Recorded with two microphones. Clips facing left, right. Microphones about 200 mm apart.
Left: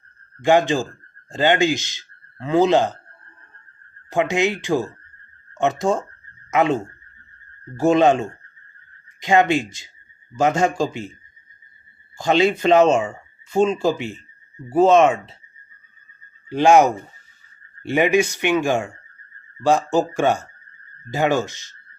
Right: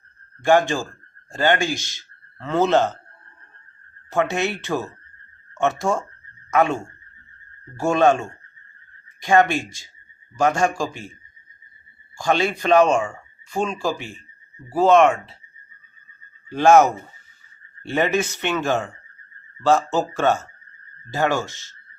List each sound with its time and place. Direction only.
0.4 s speech: 20° left (ahead or behind)
4.1 s speech: 15° left (ahead or behind)
12.1 s speech: 20° left (ahead or behind)
16.5 s speech: 15° left (ahead or behind)